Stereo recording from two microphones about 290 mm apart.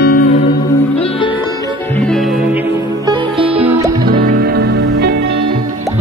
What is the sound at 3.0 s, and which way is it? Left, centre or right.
Music, centre.